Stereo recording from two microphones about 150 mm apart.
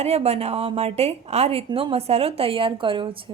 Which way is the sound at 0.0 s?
45° right (ahead or behind).